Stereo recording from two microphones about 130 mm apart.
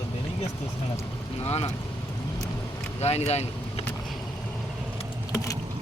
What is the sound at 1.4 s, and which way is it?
Speech, 50° left (ahead or behind).